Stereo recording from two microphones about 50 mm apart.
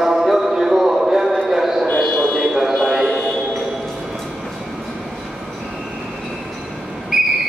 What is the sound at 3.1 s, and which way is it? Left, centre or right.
Music, left.